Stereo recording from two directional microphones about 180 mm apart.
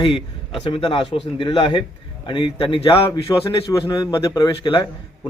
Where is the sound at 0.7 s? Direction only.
30° left (ahead or behind).